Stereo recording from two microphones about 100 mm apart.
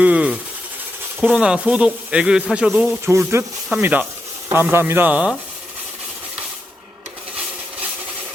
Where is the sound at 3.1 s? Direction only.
25° right (ahead or behind).